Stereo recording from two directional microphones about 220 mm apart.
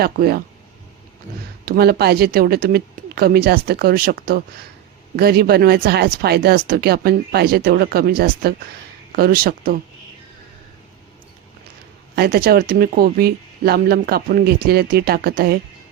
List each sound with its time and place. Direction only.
0.0 s speech: 45° right (ahead or behind)
1.6 s speech: 45° right (ahead or behind)
12.1 s speech: 45° right (ahead or behind)